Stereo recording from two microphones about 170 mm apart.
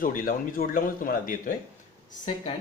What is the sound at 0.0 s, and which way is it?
Speech, 55° left (ahead or behind).